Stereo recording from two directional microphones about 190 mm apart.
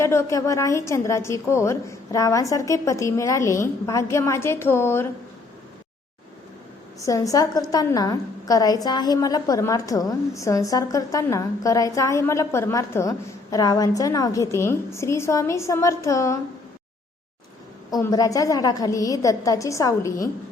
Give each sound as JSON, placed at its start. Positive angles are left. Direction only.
{"t": 0.0, "sound": "a woman's voice", "side_deg": 15}
{"t": 7.0, "sound": "a woman's voice", "side_deg": 20}
{"t": 17.9, "sound": "a woman's voice", "side_deg": 20}